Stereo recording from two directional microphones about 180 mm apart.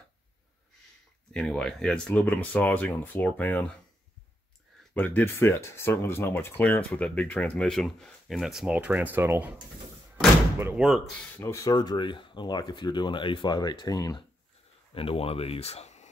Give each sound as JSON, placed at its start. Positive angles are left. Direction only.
{"t": 1.3, "sound": "speech", "side_deg": 5}
{"t": 4.9, "sound": "speech", "side_deg": 10}
{"t": 10.6, "sound": "speech", "side_deg": -15}
{"t": 10.9, "sound": "speech", "side_deg": 5}
{"t": 15.0, "sound": "speech", "side_deg": 30}